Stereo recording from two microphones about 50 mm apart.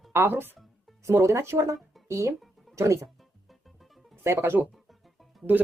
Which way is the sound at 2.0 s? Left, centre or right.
Right.